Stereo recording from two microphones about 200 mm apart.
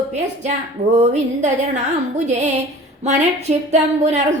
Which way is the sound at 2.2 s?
35° right (ahead or behind).